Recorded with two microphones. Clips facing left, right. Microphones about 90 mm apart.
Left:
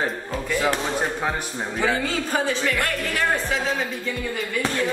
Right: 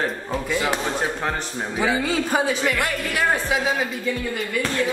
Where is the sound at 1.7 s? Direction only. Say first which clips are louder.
Right 2 dB; 10° right (ahead or behind).